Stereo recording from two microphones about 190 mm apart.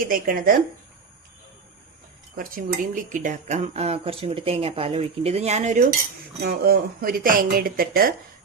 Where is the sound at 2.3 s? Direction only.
50° right (ahead or behind).